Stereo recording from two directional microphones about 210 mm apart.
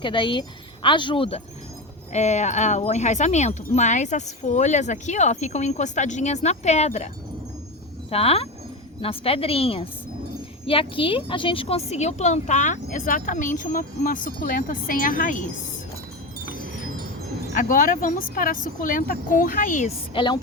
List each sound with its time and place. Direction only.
0.0 s speech: 25° left (ahead or behind)
8.1 s speech: 30° left (ahead or behind)
17.5 s speech: 40° left (ahead or behind)
20.1 s speech: 20° left (ahead or behind)